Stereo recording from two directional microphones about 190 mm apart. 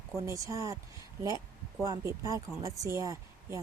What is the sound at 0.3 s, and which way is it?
Speech, 15° right (ahead or behind).